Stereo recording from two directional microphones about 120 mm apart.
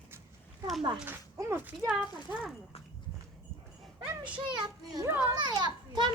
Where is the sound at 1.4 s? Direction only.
20° right (ahead or behind).